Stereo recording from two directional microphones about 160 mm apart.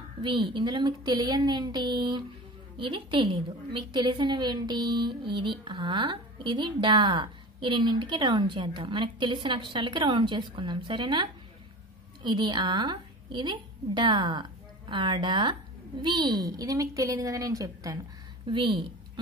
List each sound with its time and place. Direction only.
0.2 s a woman's voice: 30° right (ahead or behind)